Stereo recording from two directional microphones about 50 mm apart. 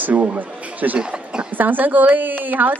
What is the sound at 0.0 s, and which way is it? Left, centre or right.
Speech, right.